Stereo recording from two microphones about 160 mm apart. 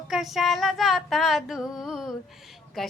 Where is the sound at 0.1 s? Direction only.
Centre (ahead or behind).